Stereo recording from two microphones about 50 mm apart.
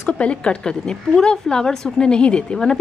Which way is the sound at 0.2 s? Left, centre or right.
Left.